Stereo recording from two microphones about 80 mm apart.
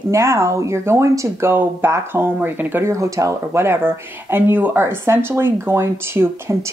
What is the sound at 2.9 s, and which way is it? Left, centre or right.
Speech, right.